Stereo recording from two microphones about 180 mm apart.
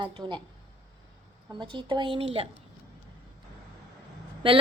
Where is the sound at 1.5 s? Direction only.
25° right (ahead or behind).